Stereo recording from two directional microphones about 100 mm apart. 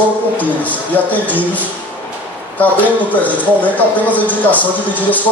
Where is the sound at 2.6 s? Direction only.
15° left (ahead or behind).